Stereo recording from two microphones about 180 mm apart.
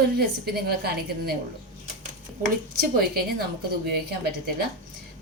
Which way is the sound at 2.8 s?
55° right (ahead or behind).